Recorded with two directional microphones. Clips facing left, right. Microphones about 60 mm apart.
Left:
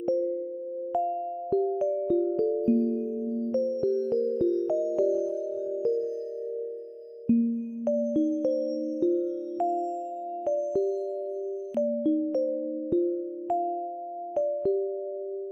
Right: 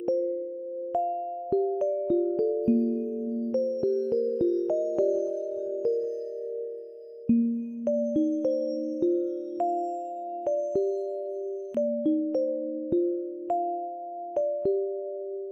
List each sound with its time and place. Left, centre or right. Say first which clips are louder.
2.8 s music: even; right
4.7 s music: even; right
8.2 s music: even; right
9.6 s music: even; centre